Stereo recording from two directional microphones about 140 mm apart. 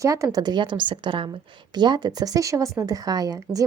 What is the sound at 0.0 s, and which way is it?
A woman's voice, 20° right (ahead or behind).